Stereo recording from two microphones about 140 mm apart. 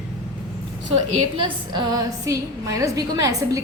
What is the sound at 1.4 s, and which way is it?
A woman's voice, 30° right (ahead or behind).